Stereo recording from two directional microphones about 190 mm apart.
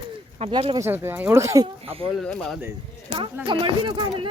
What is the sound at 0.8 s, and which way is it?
Speech, 10° right (ahead or behind).